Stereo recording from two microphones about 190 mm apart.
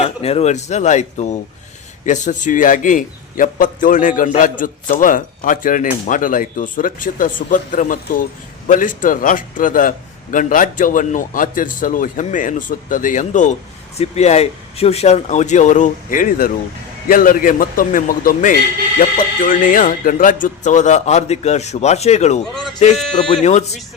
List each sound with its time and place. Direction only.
0.0 s a man's voice: 30° left (ahead or behind)